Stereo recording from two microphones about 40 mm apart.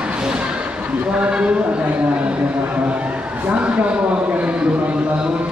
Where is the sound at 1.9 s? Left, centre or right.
Right.